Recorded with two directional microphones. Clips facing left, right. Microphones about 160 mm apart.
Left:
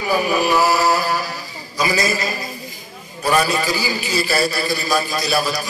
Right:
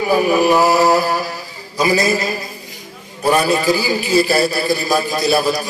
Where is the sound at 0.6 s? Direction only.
20° right (ahead or behind).